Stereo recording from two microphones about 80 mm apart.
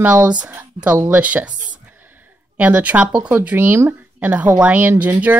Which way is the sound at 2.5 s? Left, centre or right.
Centre.